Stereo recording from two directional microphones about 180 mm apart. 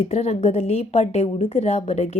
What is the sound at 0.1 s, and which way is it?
A woman's voice, 35° left (ahead or behind).